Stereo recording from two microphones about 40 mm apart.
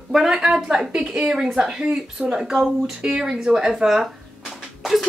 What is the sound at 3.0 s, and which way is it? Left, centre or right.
Speech, right.